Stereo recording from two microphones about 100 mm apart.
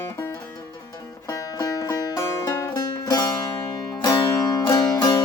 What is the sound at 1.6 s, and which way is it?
Music, 40° left (ahead or behind).